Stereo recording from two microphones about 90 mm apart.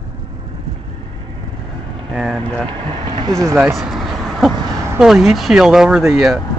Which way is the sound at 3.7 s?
Centre (ahead or behind).